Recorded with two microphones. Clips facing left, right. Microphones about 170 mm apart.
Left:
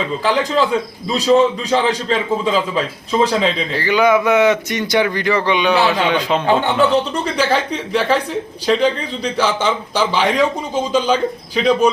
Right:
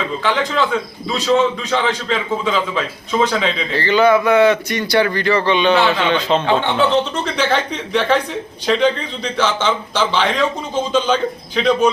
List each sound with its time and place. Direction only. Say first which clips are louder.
0.2 s a man's voice: left 2 dB; 35° left (ahead or behind)
1.3 s speech: left 3 dB; 10° left (ahead or behind)
1.7 s a man's voice: left 2 dB; 35° left (ahead or behind)
3.8 s speech: right 1 dB; 10° left (ahead or behind)